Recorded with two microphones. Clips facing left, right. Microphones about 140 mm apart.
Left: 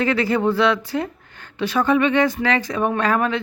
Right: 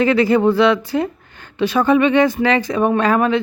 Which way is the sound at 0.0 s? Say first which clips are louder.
Right 5 dB; 20° right (ahead or behind).